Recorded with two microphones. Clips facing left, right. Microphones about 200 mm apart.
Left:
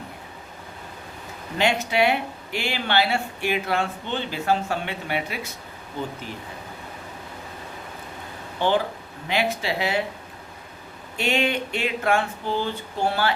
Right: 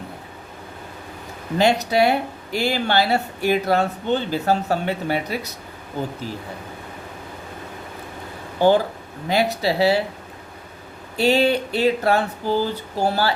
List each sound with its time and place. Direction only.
1.5 s speech: 40° right (ahead or behind)
8.5 s speech: 40° right (ahead or behind)
11.2 s speech: 35° right (ahead or behind)